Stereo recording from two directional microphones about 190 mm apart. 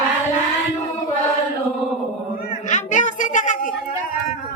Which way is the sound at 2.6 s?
40° left (ahead or behind).